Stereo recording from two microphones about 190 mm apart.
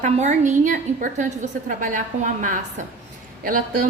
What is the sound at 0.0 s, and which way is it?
A woman's voice, 40° right (ahead or behind).